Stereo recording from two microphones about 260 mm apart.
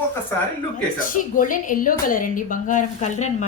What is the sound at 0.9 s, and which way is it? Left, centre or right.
A woman's voice, left.